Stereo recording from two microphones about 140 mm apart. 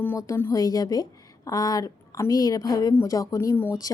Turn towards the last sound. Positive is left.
turn(degrees=25)  # may be behind; listen again after turning